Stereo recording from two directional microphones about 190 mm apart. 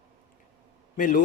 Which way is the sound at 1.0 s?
45° left (ahead or behind).